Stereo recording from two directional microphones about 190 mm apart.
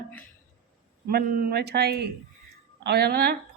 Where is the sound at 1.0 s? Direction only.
55° right (ahead or behind).